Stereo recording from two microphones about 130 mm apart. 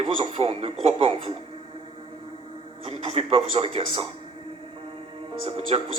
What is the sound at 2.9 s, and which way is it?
A man's voice, 50° right (ahead or behind).